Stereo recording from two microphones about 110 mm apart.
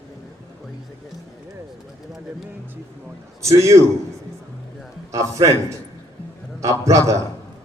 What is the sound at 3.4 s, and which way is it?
Speech, 25° right (ahead or behind).